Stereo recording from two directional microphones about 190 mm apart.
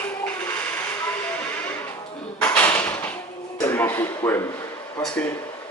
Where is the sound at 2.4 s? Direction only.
10° left (ahead or behind).